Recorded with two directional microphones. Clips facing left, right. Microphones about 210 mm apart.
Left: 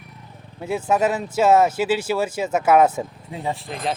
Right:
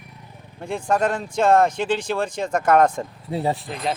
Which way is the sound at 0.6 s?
5° left (ahead or behind).